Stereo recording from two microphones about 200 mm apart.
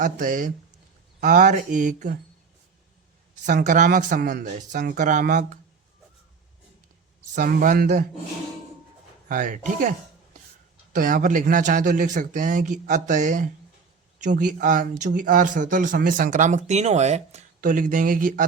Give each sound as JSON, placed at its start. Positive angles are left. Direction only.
{"t": 0.0, "sound": "speech", "side_deg": -40}
{"t": 3.4, "sound": "speech", "side_deg": -40}
{"t": 7.3, "sound": "a man's voice", "side_deg": -45}
{"t": 9.3, "sound": "speech", "side_deg": -40}
{"t": 10.9, "sound": "speech", "side_deg": -45}